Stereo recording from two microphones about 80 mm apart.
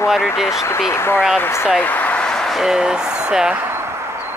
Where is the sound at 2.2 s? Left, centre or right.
Centre.